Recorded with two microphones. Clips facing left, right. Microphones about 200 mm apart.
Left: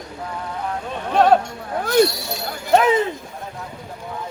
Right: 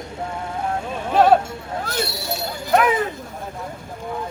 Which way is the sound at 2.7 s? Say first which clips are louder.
Left 2 dB; 25° left (ahead or behind).